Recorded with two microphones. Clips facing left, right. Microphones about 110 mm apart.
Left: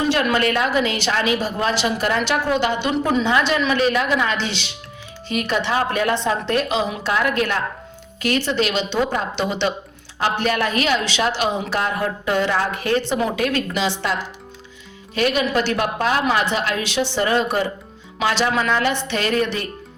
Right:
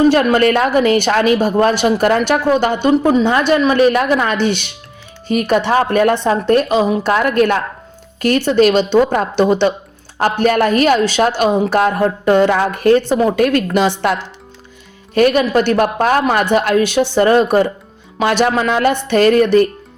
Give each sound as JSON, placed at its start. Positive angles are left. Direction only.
{"t": 0.0, "sound": "a woman's voice", "side_deg": -45}